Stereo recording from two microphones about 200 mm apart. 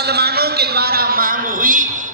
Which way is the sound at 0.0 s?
55° right (ahead or behind).